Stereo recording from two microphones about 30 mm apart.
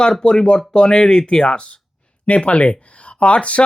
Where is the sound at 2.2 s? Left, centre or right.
Left.